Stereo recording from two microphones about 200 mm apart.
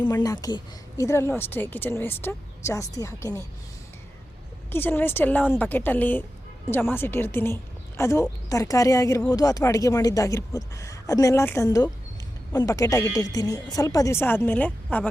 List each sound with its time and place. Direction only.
0.0 s speech: 20° left (ahead or behind)
4.7 s speech: 10° left (ahead or behind)